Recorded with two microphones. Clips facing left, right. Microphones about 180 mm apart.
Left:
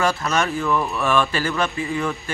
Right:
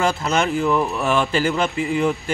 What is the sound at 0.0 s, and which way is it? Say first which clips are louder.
Speech: right 1 dB; 25° right (ahead or behind).